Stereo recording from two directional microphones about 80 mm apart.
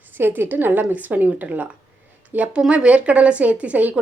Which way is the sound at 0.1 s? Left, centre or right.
Right.